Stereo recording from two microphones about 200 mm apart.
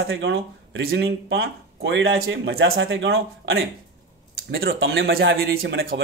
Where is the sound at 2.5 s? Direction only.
50° right (ahead or behind).